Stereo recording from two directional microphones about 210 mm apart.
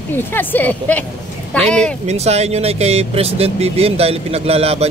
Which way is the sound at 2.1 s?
30° right (ahead or behind).